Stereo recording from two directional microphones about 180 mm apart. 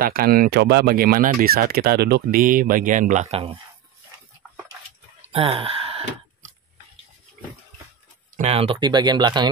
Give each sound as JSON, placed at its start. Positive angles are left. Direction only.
{"t": 0.0, "sound": "speech", "side_deg": -55}
{"t": 5.2, "sound": "a sound", "side_deg": -35}
{"t": 8.4, "sound": "speech", "side_deg": -35}